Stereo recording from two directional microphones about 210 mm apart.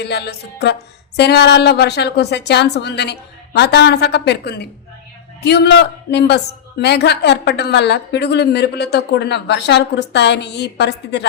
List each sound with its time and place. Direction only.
0.0 s speech: 50° left (ahead or behind)